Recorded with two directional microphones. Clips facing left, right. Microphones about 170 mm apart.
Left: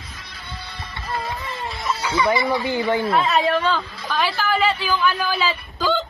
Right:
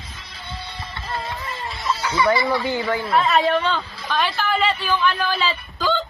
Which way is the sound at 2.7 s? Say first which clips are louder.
Left 3 dB; 25° left (ahead or behind).